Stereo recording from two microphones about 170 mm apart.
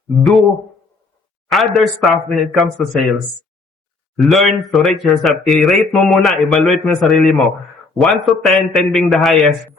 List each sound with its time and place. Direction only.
1.5 s speech: centre (ahead or behind)
4.2 s speech: centre (ahead or behind)